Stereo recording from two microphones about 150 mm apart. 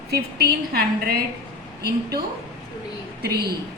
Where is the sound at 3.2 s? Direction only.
90° right.